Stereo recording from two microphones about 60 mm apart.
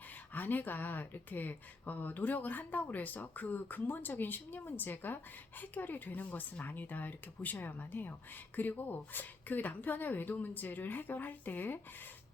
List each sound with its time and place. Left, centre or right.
0.3 s speech: left